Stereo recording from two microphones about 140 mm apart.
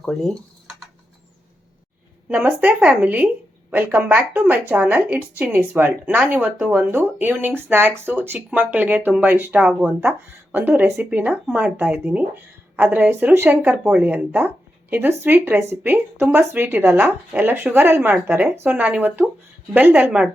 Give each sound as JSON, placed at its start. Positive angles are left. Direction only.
{"t": 0.0, "sound": "speech", "side_deg": 5}
{"t": 2.3, "sound": "speech", "side_deg": -10}